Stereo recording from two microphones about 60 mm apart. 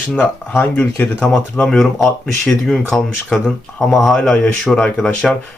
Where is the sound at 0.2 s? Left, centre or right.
Left.